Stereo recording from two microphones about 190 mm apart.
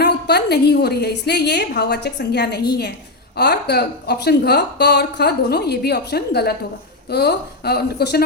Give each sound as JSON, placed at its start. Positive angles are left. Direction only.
{"t": 0.0, "sound": "speech", "side_deg": 60}